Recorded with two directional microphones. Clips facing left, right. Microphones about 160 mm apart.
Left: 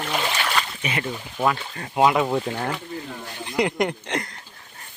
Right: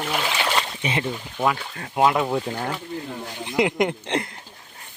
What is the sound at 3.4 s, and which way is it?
Speech, 20° right (ahead or behind).